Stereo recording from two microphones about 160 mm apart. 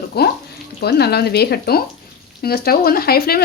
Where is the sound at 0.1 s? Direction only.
85° left.